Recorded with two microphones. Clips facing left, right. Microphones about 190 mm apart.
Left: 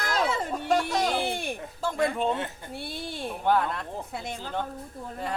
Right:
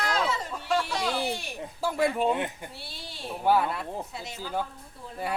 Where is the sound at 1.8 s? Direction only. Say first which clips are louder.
Right 1 dB; 5° right (ahead or behind).